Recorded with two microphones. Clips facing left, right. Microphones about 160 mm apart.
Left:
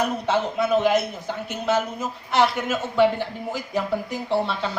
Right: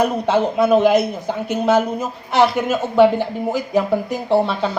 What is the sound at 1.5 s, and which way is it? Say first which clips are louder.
A man's voice: right 7 dB; 40° right (ahead or behind).